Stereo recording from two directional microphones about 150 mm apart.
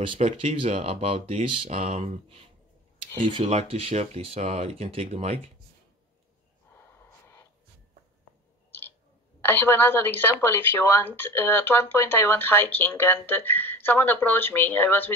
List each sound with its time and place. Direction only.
0.2 s speech: 45° right (ahead or behind)
3.4 s speech: 40° right (ahead or behind)
9.4 s a woman's voice: 15° left (ahead or behind)